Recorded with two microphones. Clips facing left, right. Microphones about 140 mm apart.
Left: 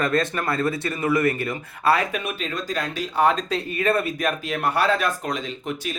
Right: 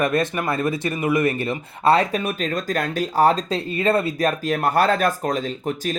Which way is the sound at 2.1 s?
35° right (ahead or behind).